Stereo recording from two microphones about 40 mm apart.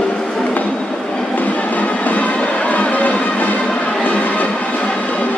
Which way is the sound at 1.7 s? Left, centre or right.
Left.